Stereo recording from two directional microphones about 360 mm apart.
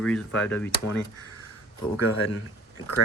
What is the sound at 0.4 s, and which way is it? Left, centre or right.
Speech, centre.